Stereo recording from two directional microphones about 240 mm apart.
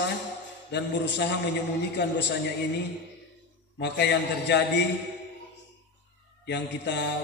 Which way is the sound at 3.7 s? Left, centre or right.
Left.